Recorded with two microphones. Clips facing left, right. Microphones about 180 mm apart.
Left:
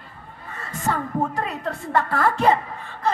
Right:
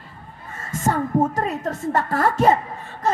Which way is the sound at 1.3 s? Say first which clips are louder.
Right 3 dB; 40° right (ahead or behind).